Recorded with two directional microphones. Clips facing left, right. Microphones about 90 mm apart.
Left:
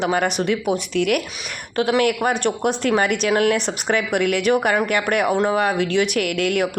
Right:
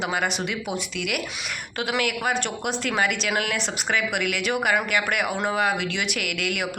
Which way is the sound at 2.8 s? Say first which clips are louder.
Left 5 dB; 55° left (ahead or behind).